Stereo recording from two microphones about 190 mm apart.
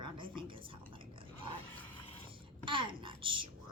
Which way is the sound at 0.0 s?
25° right (ahead or behind).